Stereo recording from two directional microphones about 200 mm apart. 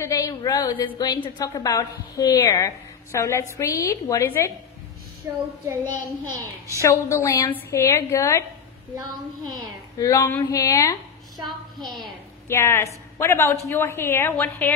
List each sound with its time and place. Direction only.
0.0 s a woman's voice: 15° left (ahead or behind)
5.2 s child singing: 15° right (ahead or behind)
6.4 s a woman's voice: 15° left (ahead or behind)
9.9 s a woman's voice: 15° left (ahead or behind)
11.8 s a woman's voice: centre (ahead or behind)
12.4 s a woman's voice: 15° left (ahead or behind)